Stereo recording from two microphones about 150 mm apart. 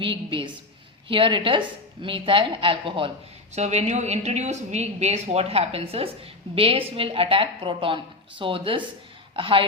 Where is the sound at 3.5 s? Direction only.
50° right (ahead or behind).